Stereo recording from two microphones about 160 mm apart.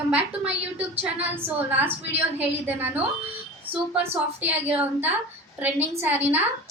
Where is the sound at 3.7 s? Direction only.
10° right (ahead or behind).